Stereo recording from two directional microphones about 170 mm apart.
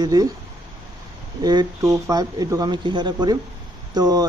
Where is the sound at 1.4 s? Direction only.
25° right (ahead or behind).